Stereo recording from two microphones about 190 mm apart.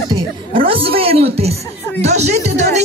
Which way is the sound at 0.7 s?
30° right (ahead or behind).